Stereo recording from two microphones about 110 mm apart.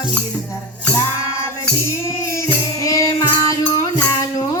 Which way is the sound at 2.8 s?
30° left (ahead or behind).